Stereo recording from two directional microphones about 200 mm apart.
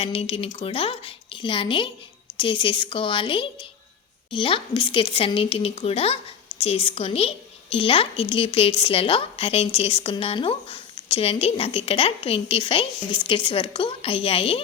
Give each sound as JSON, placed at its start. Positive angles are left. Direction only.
{"t": 0.0, "sound": "a woman's voice", "side_deg": 30}